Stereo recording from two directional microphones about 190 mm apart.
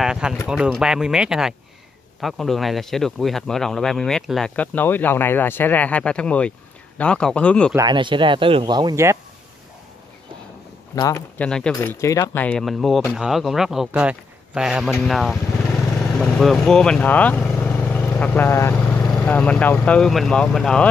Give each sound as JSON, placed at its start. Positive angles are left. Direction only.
{"t": 0.0, "sound": "a sound", "side_deg": -5}
{"t": 0.5, "sound": "speech", "side_deg": -5}
{"t": 7.7, "sound": "speech", "side_deg": -25}
{"t": 11.0, "sound": "speech", "side_deg": 15}
{"t": 11.4, "sound": "speech", "side_deg": 5}